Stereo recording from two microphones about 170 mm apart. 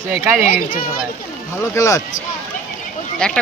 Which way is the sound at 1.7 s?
20° left (ahead or behind).